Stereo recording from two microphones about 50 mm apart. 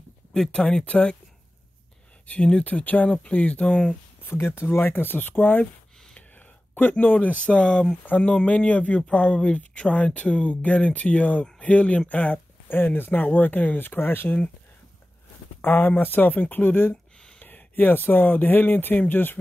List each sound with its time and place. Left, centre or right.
0.3 s speech: centre
2.3 s speech: left
4.2 s speech: left
6.7 s speech: left
7.3 s speech: left
12.6 s speech: left
13.7 s speech: left
15.6 s speech: left